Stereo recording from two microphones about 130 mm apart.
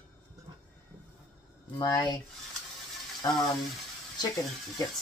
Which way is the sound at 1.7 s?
30° left (ahead or behind).